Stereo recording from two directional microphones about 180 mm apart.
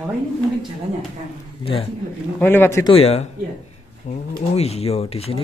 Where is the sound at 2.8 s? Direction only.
30° left (ahead or behind).